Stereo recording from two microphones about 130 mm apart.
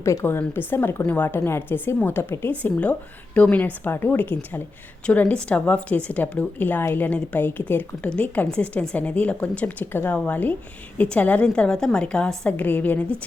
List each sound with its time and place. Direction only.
0.0 s a woman's voice: 20° left (ahead or behind)